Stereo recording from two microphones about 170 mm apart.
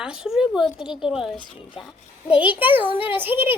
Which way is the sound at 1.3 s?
30° left (ahead or behind).